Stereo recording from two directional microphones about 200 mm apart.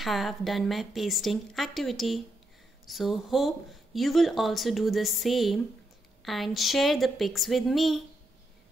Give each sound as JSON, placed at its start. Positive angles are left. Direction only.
{"t": 0.0, "sound": "speech", "side_deg": 0}